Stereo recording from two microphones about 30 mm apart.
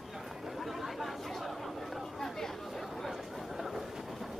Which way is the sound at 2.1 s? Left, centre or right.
Centre.